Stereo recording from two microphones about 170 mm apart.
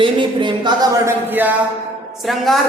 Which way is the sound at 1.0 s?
15° right (ahead or behind).